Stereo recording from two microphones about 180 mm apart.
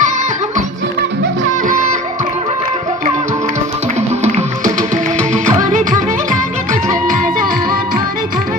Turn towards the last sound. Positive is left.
turn(degrees=-50)  # may be behind; listen again after turning